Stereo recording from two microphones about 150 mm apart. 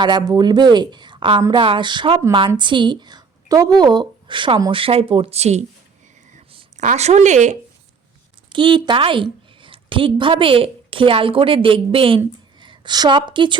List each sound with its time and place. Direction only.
0.0 s a woman's voice: 30° right (ahead or behind); by 5.6 s 45° right (ahead or behind)
6.7 s speech: 50° right (ahead or behind)
8.5 s a woman's voice: 30° right (ahead or behind)